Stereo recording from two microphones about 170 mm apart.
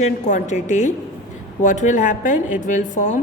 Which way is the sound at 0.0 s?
45° left (ahead or behind).